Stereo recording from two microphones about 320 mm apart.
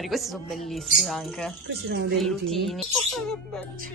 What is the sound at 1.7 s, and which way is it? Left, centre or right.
Speech, right.